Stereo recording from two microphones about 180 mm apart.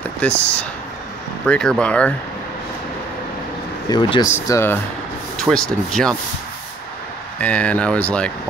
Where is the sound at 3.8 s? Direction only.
25° left (ahead or behind).